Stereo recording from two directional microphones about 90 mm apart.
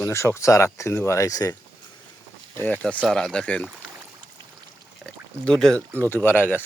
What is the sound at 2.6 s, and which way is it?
Speech, 15° left (ahead or behind).